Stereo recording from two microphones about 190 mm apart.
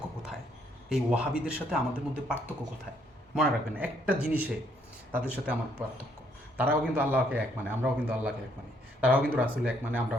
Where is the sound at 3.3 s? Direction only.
5° right (ahead or behind).